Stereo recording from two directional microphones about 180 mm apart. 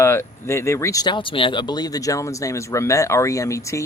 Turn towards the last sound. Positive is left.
turn(degrees=15)  # may be behind; listen again after turning